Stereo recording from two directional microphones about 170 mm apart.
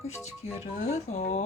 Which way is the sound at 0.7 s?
40° left (ahead or behind).